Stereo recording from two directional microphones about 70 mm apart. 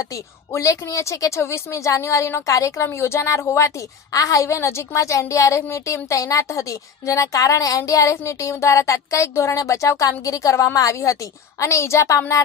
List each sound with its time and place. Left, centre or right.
0.0 s a woman's voice: left
2.8 s a woman's voice: left